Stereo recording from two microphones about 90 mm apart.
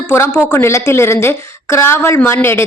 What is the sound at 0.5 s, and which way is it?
Speech, 30° left (ahead or behind).